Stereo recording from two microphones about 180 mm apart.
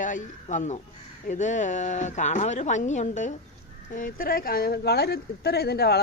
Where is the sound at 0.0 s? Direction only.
45° left (ahead or behind).